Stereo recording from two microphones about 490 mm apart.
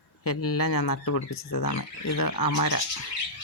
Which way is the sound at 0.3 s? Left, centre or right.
Left.